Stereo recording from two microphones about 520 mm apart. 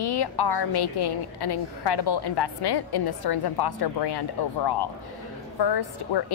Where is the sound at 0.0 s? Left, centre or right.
Left.